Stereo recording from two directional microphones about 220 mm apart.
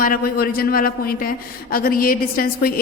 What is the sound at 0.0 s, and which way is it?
A man's voice, 40° left (ahead or behind).